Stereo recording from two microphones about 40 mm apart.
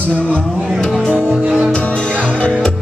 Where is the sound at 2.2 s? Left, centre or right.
Left.